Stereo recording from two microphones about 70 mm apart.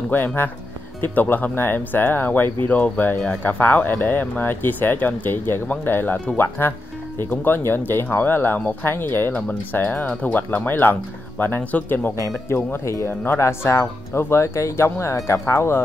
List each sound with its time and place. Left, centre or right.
0.1 s speech: left
12.4 s speech: left